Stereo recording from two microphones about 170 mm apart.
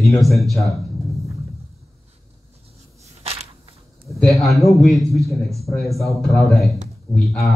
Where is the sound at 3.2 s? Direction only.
35° right (ahead or behind).